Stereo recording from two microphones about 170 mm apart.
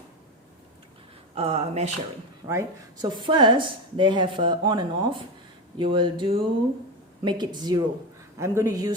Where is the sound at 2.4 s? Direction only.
20° right (ahead or behind).